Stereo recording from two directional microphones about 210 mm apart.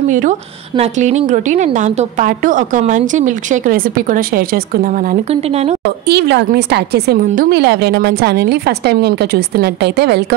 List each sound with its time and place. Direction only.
0.1 s a woman's voice: 35° right (ahead or behind)
5.3 s a woman's voice: 30° right (ahead or behind)
6.0 s a woman's voice: 50° right (ahead or behind)